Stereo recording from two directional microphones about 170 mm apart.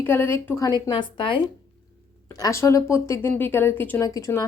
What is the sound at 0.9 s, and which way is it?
A woman's voice, 30° left (ahead or behind).